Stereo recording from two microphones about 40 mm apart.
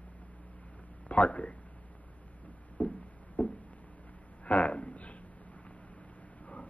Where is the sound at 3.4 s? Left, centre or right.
Left.